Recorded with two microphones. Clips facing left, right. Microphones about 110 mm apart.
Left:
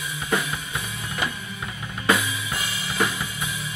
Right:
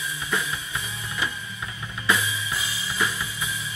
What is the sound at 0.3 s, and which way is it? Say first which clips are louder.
Drum kit: left 4 dB; 55° left (ahead or behind).